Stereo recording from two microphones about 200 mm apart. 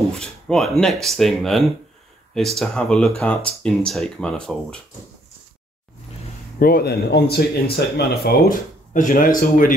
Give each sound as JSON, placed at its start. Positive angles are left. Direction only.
{"t": 0.2, "sound": "speech", "side_deg": 5}
{"t": 6.6, "sound": "speech", "side_deg": 50}